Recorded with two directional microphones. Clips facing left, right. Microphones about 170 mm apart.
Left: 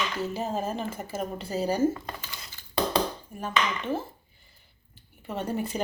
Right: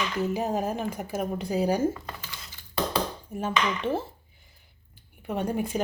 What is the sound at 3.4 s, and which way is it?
Speech, 30° right (ahead or behind).